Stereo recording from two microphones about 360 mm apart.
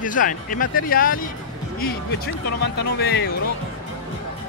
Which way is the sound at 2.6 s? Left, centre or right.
Left.